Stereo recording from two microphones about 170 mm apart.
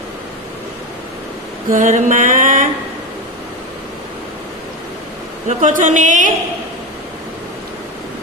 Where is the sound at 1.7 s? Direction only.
50° right (ahead or behind).